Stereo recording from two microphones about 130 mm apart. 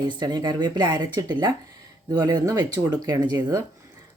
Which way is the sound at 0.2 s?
30° right (ahead or behind).